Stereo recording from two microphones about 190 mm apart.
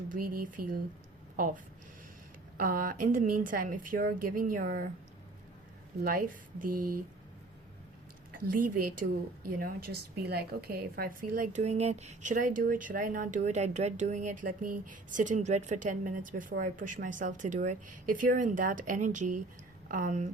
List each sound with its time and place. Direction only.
0.1 s a woman's voice: 45° right (ahead or behind)
6.0 s a woman's voice: 50° right (ahead or behind)
8.3 s a woman's voice: 45° right (ahead or behind)